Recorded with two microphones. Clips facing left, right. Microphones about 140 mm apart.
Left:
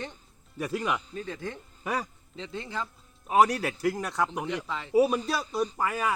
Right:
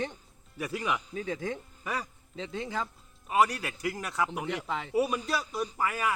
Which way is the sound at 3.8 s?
Centre (ahead or behind).